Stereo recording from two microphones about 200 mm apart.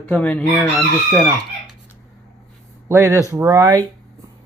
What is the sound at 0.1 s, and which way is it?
Chicken, 5° left (ahead or behind).